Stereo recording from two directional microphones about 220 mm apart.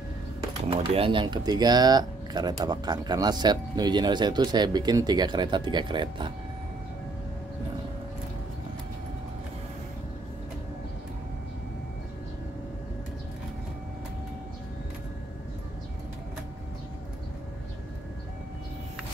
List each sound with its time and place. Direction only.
0.7 s speech: 25° right (ahead or behind)